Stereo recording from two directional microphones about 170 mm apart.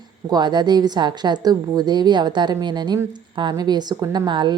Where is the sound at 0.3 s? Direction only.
25° right (ahead or behind).